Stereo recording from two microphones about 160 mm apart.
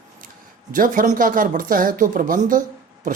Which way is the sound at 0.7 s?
60° right (ahead or behind).